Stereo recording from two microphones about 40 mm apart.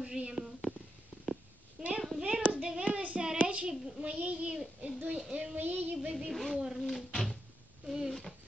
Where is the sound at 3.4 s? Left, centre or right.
Right.